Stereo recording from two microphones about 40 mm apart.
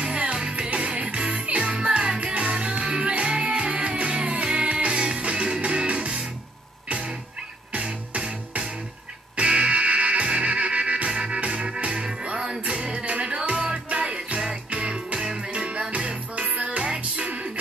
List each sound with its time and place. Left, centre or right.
0.4 s music: right
0.7 s music: right; by 15.5 s centre
15.5 s music: right